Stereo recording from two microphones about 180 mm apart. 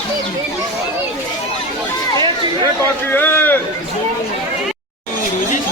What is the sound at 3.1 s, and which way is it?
Speech, 10° left (ahead or behind).